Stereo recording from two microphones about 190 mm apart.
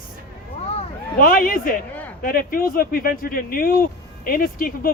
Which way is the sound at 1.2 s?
50° left (ahead or behind).